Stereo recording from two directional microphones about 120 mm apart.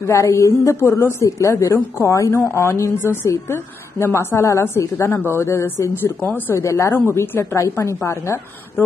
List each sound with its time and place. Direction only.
0.0 s a woman's voice: 25° left (ahead or behind)